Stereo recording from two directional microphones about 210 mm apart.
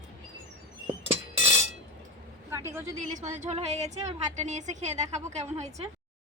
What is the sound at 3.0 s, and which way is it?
A woman's voice, 35° right (ahead or behind).